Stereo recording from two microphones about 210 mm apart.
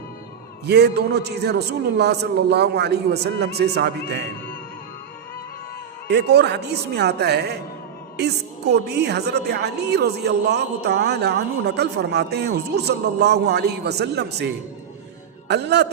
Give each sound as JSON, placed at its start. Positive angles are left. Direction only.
{"t": 0.6, "sound": "a woman's voice", "side_deg": -50}
{"t": 6.1, "sound": "a woman's voice", "side_deg": -55}